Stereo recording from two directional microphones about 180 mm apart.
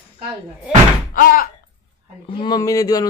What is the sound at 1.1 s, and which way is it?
Speech, 50° left (ahead or behind).